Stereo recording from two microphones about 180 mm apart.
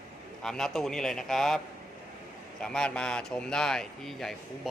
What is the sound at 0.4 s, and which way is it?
A man's voice, centre (ahead or behind).